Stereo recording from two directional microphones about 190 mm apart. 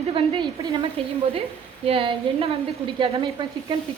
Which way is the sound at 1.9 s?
30° right (ahead or behind).